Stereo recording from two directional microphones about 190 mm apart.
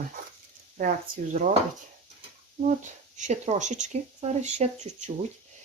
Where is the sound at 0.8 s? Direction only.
45° right (ahead or behind).